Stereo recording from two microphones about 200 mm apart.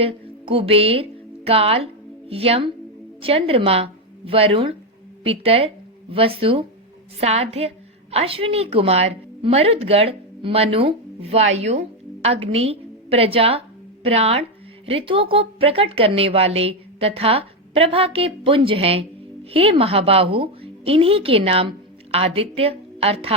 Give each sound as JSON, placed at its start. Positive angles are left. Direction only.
{"t": 0.0, "sound": "a woman's voice", "side_deg": -30}